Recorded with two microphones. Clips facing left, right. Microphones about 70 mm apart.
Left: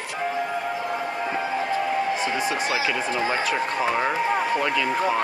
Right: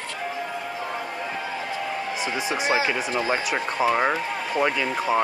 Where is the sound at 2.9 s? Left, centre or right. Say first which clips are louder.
Even; centre.